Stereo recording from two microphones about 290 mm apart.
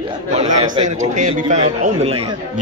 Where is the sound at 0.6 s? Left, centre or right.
Right.